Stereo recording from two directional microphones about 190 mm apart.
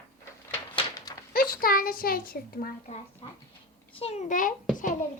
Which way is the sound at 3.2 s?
30° left (ahead or behind).